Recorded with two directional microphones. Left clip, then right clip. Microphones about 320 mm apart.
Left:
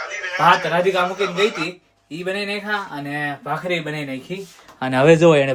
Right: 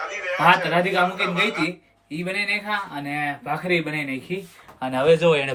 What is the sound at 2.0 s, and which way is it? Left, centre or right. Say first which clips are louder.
Speech: even; centre.